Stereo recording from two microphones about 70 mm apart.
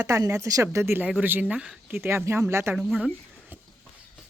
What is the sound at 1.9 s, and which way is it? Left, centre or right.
Speech, right.